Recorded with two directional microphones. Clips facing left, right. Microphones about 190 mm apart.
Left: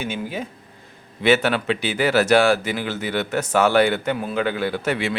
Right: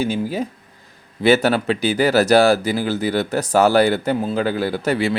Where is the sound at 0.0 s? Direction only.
35° right (ahead or behind).